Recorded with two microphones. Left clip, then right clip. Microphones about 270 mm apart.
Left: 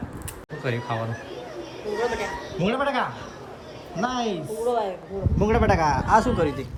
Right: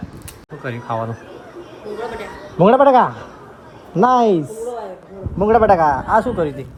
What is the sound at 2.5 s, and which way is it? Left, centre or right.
Speech, centre.